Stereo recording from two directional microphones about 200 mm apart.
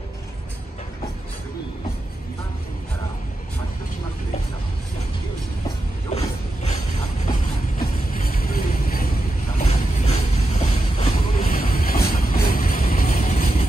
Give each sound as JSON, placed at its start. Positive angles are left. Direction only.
{"t": 6.1, "sound": "ratchet", "side_deg": 30}
{"t": 7.2, "sound": "music", "side_deg": 45}
{"t": 9.6, "sound": "a sound", "side_deg": 30}
{"t": 11.4, "sound": "boat", "side_deg": 45}
{"t": 12.1, "sound": "music", "side_deg": 45}